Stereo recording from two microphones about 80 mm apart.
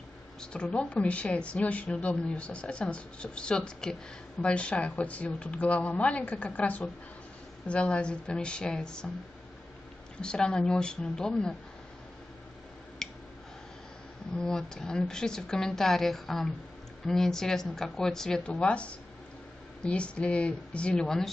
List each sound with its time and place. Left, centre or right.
0.4 s speech: centre
10.2 s speech: centre
13.0 s a sound: centre
14.3 s speech: centre